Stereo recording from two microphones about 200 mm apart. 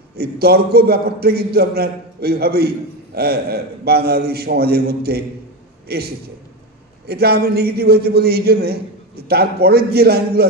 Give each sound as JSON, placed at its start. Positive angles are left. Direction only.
{"t": 0.1, "sound": "a man's voice", "side_deg": -50}